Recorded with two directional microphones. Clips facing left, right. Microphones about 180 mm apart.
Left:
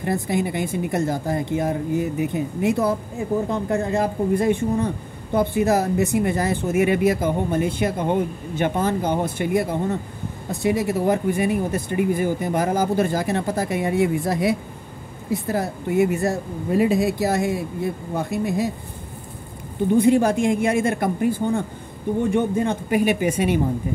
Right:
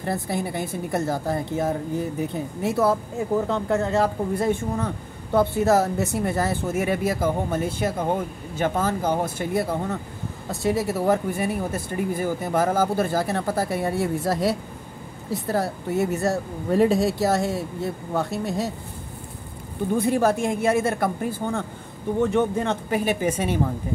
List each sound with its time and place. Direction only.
0.0 s speech: 15° left (ahead or behind)
20.0 s speech: 15° left (ahead or behind)